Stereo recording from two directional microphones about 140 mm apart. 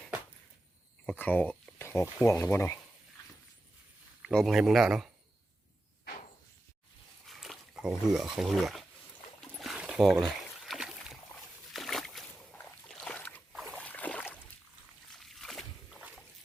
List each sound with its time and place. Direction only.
1.0 s speech: 10° left (ahead or behind)
4.2 s a man's voice: 5° left (ahead or behind)
7.3 s speech: centre (ahead or behind)
9.4 s rowboat: centre (ahead or behind)
11.7 s a sound: centre (ahead or behind)
13.5 s boat: centre (ahead or behind)
15.1 s a sound: centre (ahead or behind)